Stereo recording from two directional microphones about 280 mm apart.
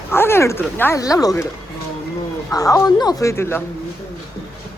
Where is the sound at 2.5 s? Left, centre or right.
Centre.